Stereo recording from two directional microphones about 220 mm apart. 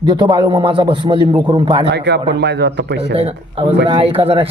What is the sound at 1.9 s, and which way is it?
A man's voice, 50° right (ahead or behind).